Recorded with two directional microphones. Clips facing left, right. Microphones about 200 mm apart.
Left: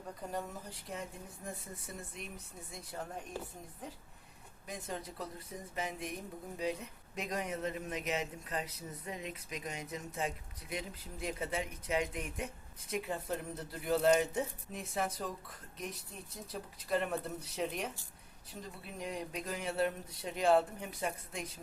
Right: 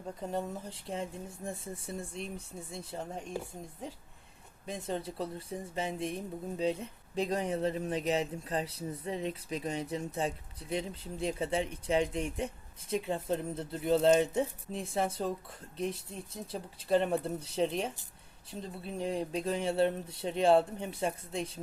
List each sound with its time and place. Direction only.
0.2 s speech: 25° right (ahead or behind)
4.6 s speech: 25° right (ahead or behind)